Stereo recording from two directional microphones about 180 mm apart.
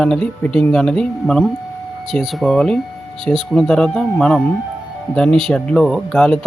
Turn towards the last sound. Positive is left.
turn(degrees=5)  # may be behind; listen again after turning